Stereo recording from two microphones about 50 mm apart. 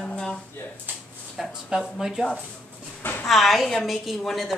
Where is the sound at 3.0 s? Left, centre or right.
Left.